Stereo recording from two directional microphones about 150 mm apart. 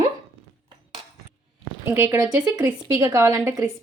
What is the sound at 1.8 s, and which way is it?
A woman's voice, 15° right (ahead or behind).